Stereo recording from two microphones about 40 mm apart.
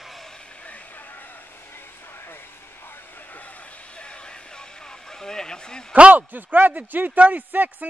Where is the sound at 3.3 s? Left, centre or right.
Left.